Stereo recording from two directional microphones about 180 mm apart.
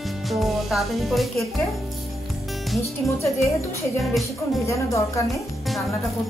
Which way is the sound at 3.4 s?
15° left (ahead or behind).